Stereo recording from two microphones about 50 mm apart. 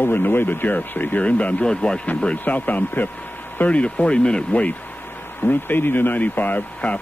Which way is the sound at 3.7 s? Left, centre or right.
Left.